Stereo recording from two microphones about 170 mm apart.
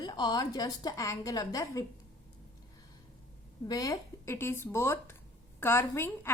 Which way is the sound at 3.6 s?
20° left (ahead or behind).